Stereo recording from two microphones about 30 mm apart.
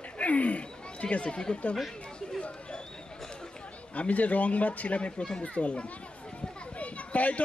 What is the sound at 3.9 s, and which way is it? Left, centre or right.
A child's voice, left.